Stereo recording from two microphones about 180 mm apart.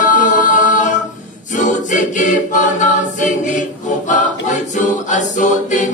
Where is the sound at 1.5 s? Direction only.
45° left (ahead or behind).